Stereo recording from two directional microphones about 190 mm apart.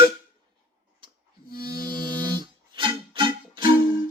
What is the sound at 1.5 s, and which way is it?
Music, 55° left (ahead or behind).